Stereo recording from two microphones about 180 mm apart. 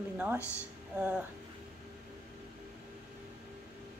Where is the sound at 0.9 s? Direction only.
5° right (ahead or behind).